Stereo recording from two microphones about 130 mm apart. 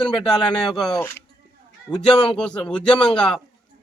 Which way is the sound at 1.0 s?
15° left (ahead or behind).